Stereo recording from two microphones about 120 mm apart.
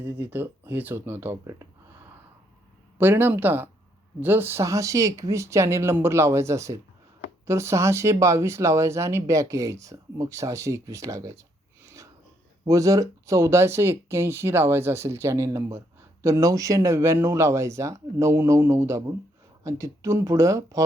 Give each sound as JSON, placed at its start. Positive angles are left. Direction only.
{"t": 0.0, "sound": "speech", "side_deg": -15}
{"t": 3.0, "sound": "speech", "side_deg": -15}